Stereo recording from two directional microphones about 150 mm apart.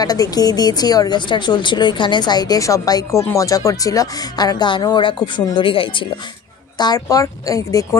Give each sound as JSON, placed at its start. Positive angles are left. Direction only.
{"t": 0.0, "sound": "speech", "side_deg": 25}